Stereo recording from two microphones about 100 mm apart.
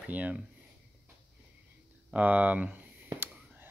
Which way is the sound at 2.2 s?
15° right (ahead or behind).